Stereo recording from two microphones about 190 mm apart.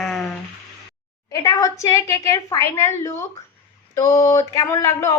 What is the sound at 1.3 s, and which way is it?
Speech, 15° left (ahead or behind).